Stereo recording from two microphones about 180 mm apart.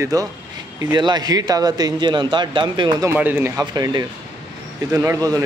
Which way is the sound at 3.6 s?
20° right (ahead or behind).